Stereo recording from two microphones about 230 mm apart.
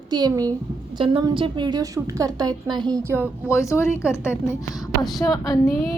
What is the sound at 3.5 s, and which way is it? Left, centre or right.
Child singing, centre.